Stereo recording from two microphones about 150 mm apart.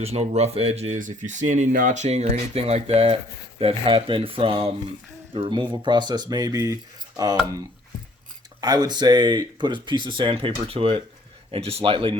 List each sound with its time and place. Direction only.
0.0 s speech: 45° right (ahead or behind)
0.9 s speech: 55° right (ahead or behind); by 6.7 s 25° right (ahead or behind)
8.6 s speech: 25° right (ahead or behind)